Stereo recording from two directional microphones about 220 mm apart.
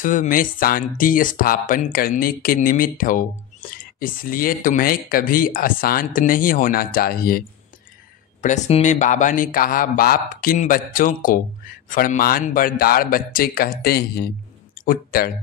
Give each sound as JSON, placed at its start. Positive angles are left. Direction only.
{"t": 0.0, "sound": "speech", "side_deg": 35}